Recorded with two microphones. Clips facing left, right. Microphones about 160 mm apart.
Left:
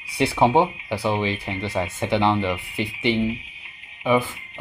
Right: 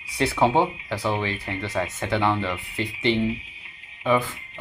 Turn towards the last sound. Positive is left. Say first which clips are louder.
# left 2 dB
turn(degrees=10)  # may be behind; listen again after turning